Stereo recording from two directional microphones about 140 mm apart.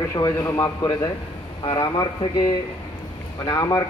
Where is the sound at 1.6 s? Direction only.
35° left (ahead or behind).